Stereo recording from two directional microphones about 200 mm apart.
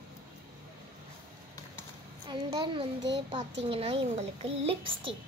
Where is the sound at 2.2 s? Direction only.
20° right (ahead or behind).